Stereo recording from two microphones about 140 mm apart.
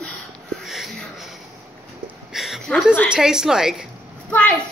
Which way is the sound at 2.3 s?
Centre (ahead or behind).